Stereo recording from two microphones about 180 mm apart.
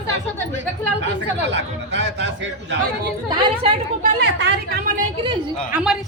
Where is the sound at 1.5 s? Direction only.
80° right.